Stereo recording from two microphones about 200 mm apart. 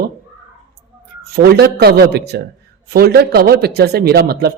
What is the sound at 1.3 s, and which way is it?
A man's voice, 55° right (ahead or behind).